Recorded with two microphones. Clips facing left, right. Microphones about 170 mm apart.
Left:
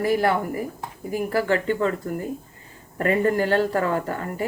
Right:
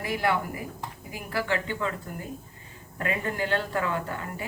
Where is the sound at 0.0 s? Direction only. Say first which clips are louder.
Left 6 dB; 40° left (ahead or behind).